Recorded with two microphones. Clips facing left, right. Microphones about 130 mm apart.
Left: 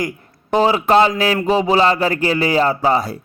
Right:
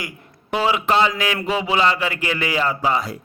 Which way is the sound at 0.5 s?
35° left (ahead or behind).